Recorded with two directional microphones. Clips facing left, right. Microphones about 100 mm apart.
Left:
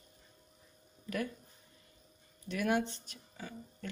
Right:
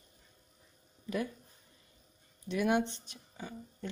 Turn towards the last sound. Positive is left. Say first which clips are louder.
# right 2 dB
turn(degrees=-20)  # may be behind; listen again after turning